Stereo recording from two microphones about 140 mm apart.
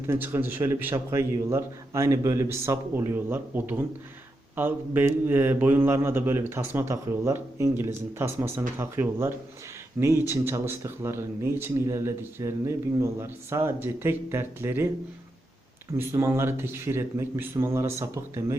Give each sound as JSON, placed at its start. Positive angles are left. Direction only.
{"t": 0.1, "sound": "speech", "side_deg": -15}
{"t": 16.0, "sound": "speech", "side_deg": -20}